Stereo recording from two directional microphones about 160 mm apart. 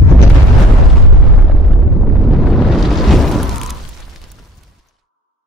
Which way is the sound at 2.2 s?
Centre (ahead or behind).